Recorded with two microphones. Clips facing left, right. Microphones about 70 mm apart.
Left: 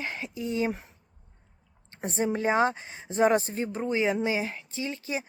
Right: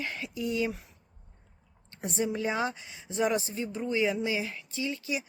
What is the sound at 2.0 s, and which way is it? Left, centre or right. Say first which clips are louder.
Speech: left 3 dB; left.